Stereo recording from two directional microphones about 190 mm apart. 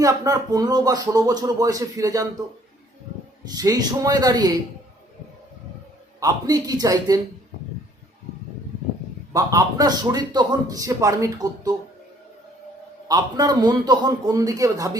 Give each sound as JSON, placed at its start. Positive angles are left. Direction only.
{"t": 0.0, "sound": "a man's voice", "side_deg": -20}
{"t": 3.4, "sound": "a man's voice", "side_deg": -20}
{"t": 6.1, "sound": "a man's voice", "side_deg": -20}
{"t": 9.3, "sound": "a man's voice", "side_deg": -20}
{"t": 13.1, "sound": "a man's voice", "side_deg": -20}